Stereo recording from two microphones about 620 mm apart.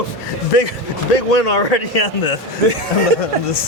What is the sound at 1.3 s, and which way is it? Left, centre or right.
Speech, left.